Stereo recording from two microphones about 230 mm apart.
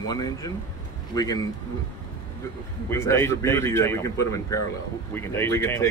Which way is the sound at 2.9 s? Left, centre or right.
Centre.